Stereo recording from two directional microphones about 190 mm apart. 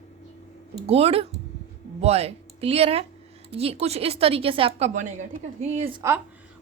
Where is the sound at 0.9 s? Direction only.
30° right (ahead or behind).